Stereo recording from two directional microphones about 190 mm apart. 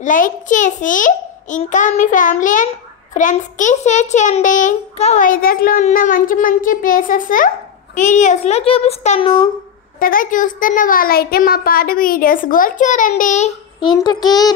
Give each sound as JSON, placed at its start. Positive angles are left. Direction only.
{"t": 0.0, "sound": "a child's voice", "side_deg": 45}
{"t": 9.9, "sound": "a child's voice", "side_deg": 50}
{"t": 13.8, "sound": "a child's voice", "side_deg": 20}